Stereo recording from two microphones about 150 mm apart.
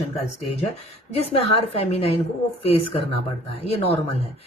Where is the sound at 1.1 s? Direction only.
40° left (ahead or behind).